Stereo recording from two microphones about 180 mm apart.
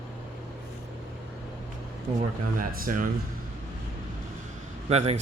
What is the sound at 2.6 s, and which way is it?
Speech, 50° right (ahead or behind).